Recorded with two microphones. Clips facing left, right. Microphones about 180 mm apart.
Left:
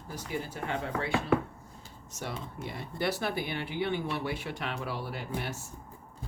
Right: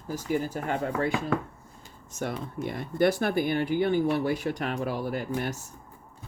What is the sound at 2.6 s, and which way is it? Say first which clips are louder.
Speech: right 10 dB; 50° right (ahead or behind).